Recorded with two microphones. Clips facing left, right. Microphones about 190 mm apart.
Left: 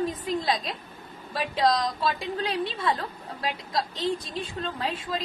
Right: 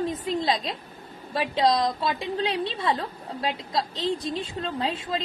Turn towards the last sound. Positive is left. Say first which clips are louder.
# right 2 dB
turn(degrees=-25)  # may be behind; listen again after turning